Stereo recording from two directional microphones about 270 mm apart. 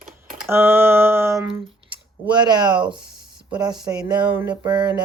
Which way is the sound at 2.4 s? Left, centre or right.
Centre.